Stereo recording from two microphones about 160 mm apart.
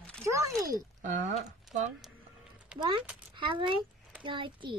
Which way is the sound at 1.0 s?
50° right (ahead or behind).